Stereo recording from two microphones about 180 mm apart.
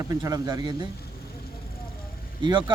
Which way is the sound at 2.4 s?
25° right (ahead or behind).